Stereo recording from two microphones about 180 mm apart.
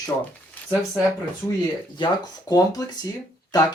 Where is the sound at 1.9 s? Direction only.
25° left (ahead or behind).